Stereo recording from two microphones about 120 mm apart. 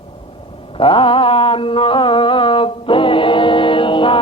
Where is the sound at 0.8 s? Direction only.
45° left (ahead or behind).